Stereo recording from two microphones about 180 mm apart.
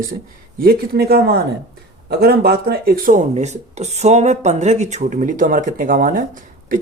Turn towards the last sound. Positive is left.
turn(degrees=-50)  # may be behind; listen again after turning